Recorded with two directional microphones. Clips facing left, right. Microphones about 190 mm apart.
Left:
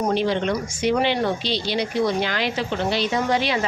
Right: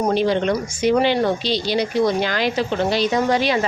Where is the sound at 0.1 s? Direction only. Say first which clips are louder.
Right 3 dB; 40° right (ahead or behind).